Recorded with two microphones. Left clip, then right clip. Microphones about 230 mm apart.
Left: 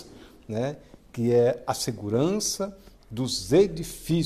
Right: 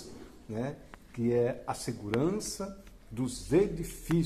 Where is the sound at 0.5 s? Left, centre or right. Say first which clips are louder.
Left 8 dB; left.